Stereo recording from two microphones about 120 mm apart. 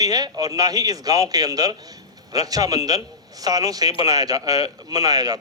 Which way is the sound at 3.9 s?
55° left (ahead or behind).